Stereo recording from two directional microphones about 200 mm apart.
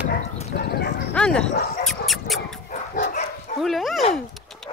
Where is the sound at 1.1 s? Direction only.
5° left (ahead or behind).